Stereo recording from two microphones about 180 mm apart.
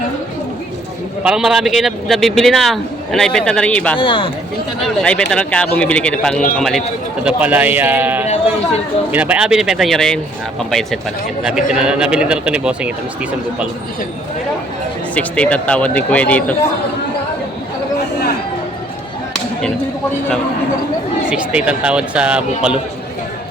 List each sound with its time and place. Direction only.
1.2 s a man's voice: 5° right (ahead or behind)
4.0 s speech: 30° left (ahead or behind)
4.8 s a man's voice: 5° left (ahead or behind)
15.1 s speech: 5° left (ahead or behind)
21.2 s speech: 5° right (ahead or behind)